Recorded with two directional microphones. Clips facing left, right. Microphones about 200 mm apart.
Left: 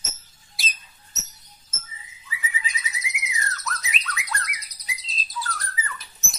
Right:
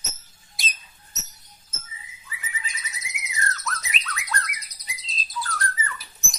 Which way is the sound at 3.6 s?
Centre (ahead or behind).